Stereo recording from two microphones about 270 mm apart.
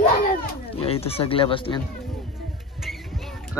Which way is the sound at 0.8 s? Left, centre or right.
Left.